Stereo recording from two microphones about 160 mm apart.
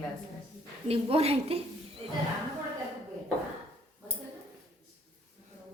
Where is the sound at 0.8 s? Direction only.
40° right (ahead or behind).